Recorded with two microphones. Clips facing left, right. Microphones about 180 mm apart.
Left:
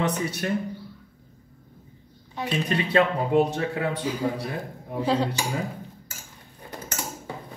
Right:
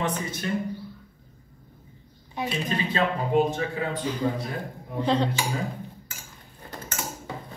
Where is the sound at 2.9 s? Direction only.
70° left (ahead or behind).